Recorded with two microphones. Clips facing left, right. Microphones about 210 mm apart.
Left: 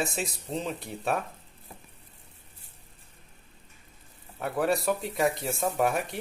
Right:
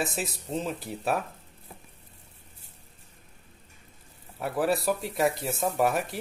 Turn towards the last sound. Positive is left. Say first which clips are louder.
# right 1 dB
turn(degrees=0)  # may be behind; listen again after turning